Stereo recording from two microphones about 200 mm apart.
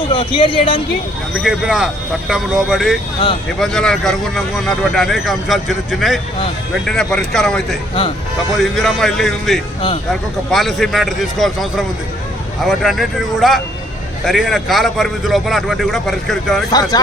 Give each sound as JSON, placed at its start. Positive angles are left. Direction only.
{"t": 0.1, "sound": "speech", "side_deg": 25}
{"t": 1.3, "sound": "speech", "side_deg": 0}